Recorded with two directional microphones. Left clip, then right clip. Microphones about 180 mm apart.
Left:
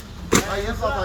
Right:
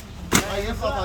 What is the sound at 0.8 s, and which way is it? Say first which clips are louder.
Speech: left 2 dB; 35° left (ahead or behind).